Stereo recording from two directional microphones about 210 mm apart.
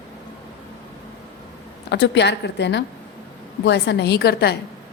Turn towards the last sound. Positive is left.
turn(degrees=50)  # may be behind; listen again after turning